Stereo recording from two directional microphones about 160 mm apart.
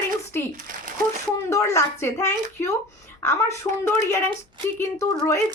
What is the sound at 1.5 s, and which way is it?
A woman's voice, 20° left (ahead or behind).